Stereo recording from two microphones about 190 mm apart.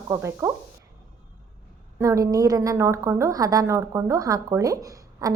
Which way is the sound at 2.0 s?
20° right (ahead or behind).